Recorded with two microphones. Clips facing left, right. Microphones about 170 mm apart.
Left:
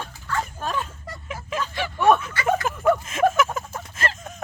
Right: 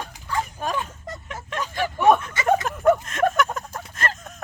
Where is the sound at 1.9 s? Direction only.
15° right (ahead or behind).